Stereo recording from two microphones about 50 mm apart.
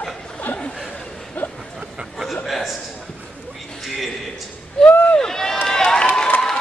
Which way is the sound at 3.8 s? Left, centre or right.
Centre.